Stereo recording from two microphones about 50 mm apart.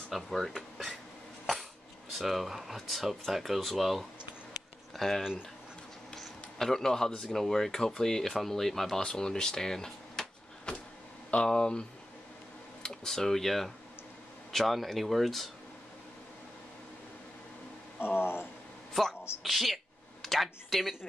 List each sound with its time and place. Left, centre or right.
0.1 s speech: centre
2.1 s speech: centre
6.1 s a sound: centre
7.2 s speech: centre
9.0 s a sound: centre
11.4 s speech: centre
12.8 s speech: centre
17.9 s speech: left
19.4 s a sound: centre